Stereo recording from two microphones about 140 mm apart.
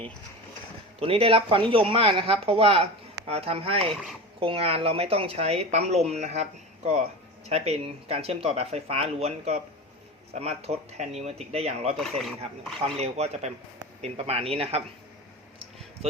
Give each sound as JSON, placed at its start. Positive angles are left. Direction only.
{"t": 0.9, "sound": "speech", "side_deg": -45}
{"t": 11.9, "sound": "speech", "side_deg": 0}
{"t": 13.0, "sound": "speech", "side_deg": -50}